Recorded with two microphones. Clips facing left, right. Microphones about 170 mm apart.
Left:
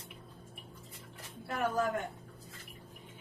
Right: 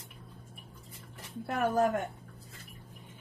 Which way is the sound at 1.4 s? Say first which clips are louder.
Right 4 dB; 55° right (ahead or behind).